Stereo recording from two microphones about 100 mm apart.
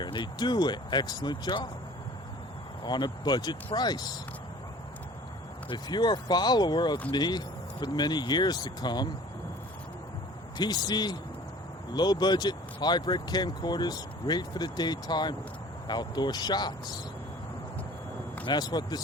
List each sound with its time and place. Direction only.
0.0 s speech: 50° left (ahead or behind)
2.8 s speech: 45° left (ahead or behind)
5.6 s speech: 45° left (ahead or behind)
10.6 s speech: 45° left (ahead or behind)
18.4 s speech: 45° left (ahead or behind)